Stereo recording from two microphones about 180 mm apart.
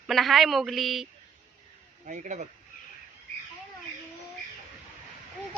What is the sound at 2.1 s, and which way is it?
Speech, 45° right (ahead or behind).